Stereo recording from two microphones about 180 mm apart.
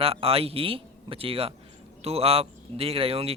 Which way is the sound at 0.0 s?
35° right (ahead or behind).